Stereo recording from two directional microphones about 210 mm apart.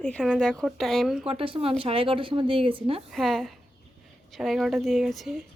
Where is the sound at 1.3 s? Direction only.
25° right (ahead or behind).